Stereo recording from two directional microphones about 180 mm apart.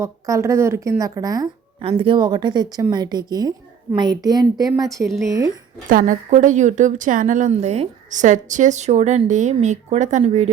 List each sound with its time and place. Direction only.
0.0 s speech: 15° right (ahead or behind)
5.0 s speech: centre (ahead or behind)
5.9 s a woman's voice: 45° right (ahead or behind)